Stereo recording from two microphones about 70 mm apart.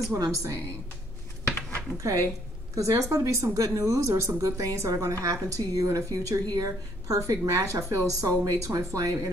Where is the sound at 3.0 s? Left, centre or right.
Right.